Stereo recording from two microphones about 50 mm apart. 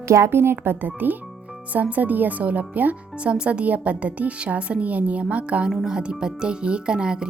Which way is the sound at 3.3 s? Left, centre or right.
Right.